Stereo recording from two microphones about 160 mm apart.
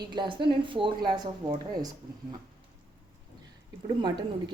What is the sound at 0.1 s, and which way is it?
Speech, 30° right (ahead or behind).